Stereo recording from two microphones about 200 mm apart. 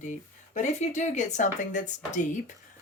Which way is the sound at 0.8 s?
35° left (ahead or behind).